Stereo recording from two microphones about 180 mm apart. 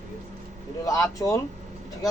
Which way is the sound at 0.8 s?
20° left (ahead or behind).